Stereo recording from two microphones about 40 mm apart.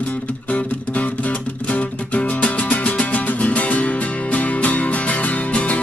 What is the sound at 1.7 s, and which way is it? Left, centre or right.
Music, left.